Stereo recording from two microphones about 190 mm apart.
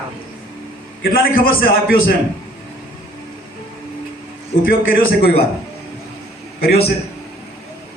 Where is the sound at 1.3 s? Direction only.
50° left (ahead or behind).